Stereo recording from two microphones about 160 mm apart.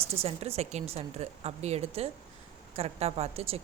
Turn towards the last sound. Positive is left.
turn(degrees=-40)  # may be behind; listen again after turning